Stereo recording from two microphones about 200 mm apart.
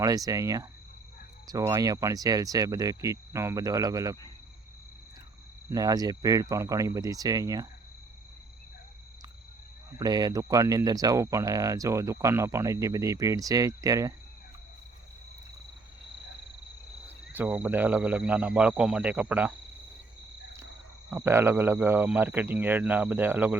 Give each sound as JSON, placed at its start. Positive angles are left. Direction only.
{"t": 0.0, "sound": "speech", "side_deg": -15}
{"t": 5.7, "sound": "speech", "side_deg": -20}
{"t": 10.0, "sound": "speech", "side_deg": -20}
{"t": 17.3, "sound": "speech", "side_deg": -10}
{"t": 21.1, "sound": "speech", "side_deg": -10}